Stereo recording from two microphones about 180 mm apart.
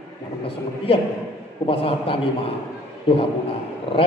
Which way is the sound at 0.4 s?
30° left (ahead or behind).